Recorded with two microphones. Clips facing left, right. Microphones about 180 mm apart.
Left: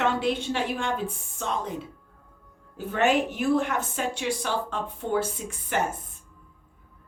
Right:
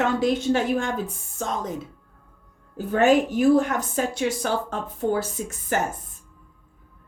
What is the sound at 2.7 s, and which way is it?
A woman's voice, 40° right (ahead or behind).